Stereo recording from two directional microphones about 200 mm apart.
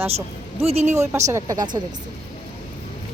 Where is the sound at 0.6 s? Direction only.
30° right (ahead or behind).